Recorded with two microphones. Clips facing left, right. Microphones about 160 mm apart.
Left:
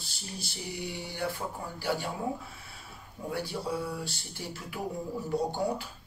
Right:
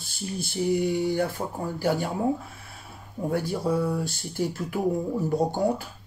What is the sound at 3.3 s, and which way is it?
Speech, 45° right (ahead or behind).